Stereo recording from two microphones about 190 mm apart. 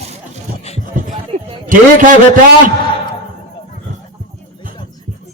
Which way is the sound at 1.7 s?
45° right (ahead or behind).